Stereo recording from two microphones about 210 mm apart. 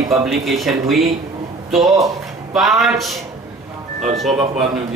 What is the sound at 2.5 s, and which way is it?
Speech, centre (ahead or behind).